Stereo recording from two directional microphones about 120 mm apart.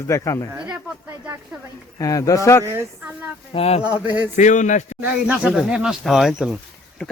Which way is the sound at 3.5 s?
60° left (ahead or behind).